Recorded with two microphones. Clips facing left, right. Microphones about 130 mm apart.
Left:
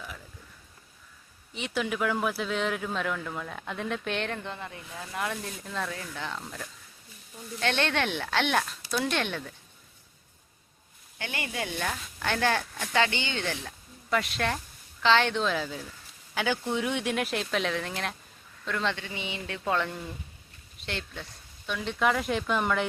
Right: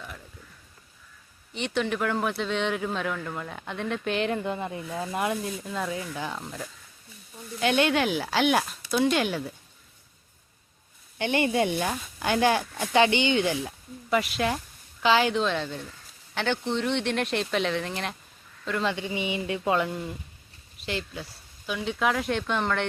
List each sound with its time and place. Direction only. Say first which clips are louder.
1.5 s speech: right 3 dB; centre (ahead or behind)
4.6 s speech: right 8 dB; 25° right (ahead or behind)
5.6 s speech: right 4 dB; 10° right (ahead or behind)
11.2 s speech: right 10 dB; 25° right (ahead or behind); by 18.9 s 5° right (ahead or behind)
18.9 s speech: right 7 dB; 15° right (ahead or behind); by 22.9 s 5° left (ahead or behind)